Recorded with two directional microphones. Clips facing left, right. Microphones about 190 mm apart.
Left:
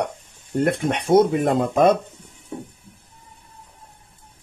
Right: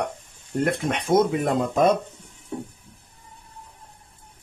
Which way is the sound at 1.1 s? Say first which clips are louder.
Left 4 dB; 30° left (ahead or behind).